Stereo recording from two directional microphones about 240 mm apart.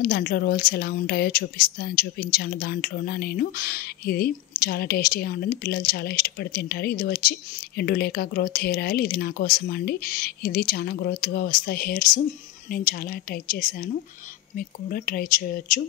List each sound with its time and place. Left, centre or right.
0.0 s a woman's voice: left